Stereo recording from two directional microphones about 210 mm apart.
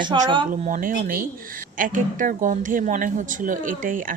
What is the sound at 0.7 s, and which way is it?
Speech, 40° right (ahead or behind).